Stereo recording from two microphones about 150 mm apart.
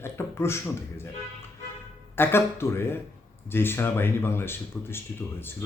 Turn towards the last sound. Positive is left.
turn(degrees=15)  # may be behind; listen again after turning